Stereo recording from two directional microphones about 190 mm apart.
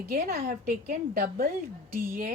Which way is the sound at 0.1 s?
50° right (ahead or behind).